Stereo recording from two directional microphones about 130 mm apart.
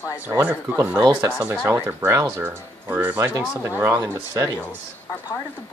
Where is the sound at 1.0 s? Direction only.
35° right (ahead or behind).